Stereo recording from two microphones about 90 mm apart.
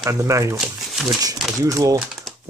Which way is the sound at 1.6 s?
35° right (ahead or behind).